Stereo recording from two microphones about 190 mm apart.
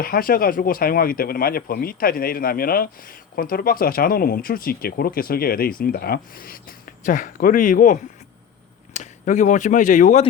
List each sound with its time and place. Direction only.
0.0 s speech: 50° left (ahead or behind)